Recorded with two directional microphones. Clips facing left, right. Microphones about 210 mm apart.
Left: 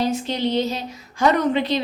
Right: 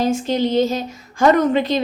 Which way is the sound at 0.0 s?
45° right (ahead or behind).